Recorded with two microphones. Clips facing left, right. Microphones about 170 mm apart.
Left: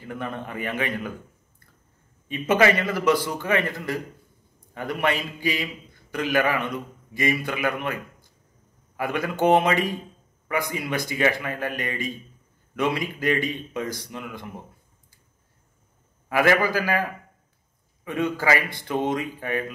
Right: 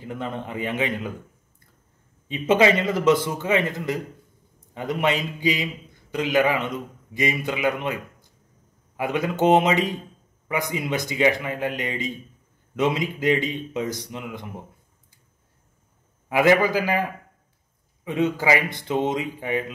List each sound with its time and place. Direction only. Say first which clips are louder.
0.0 s a man's voice: right 1 dB; 20° right (ahead or behind)
2.2 s speech: right 1 dB; 20° right (ahead or behind)
16.3 s speech: right 2 dB; 15° right (ahead or behind)